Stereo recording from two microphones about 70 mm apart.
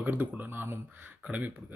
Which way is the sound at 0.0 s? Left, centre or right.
Right.